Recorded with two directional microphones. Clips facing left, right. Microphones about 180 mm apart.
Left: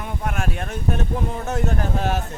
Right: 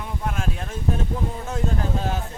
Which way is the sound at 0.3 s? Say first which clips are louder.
Left 2 dB; 70° left (ahead or behind).